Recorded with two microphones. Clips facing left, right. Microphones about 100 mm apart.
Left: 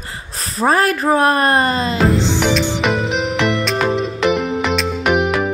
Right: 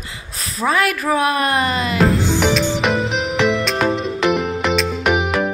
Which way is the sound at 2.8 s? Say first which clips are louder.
Left 1 dB; centre (ahead or behind).